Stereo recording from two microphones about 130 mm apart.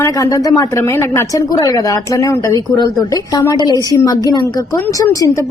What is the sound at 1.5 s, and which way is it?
A woman's voice, 30° left (ahead or behind).